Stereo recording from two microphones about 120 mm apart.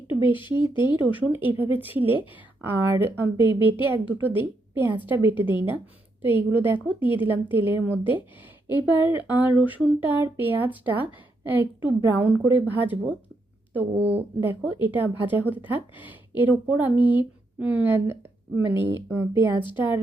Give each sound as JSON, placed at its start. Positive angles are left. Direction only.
{"t": 0.1, "sound": "a sound", "side_deg": -15}
{"t": 0.3, "sound": "speech", "side_deg": 40}
{"t": 0.8, "sound": "speech", "side_deg": -15}